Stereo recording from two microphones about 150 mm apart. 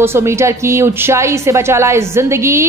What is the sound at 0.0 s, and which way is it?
A woman's voice, 15° right (ahead or behind).